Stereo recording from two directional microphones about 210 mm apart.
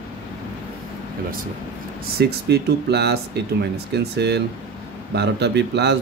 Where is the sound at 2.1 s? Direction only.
50° right (ahead or behind).